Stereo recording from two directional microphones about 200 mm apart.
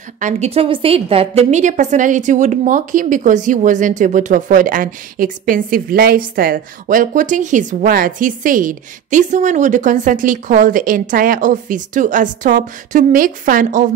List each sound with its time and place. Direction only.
0.2 s a woman's voice: 35° right (ahead or behind)